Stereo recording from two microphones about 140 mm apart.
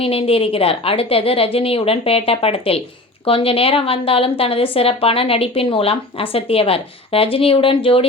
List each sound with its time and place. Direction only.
0.0 s a woman's voice: 45° left (ahead or behind)